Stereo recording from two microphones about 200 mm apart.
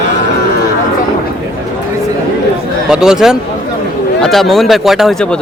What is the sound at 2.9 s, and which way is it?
Speech, 5° right (ahead or behind).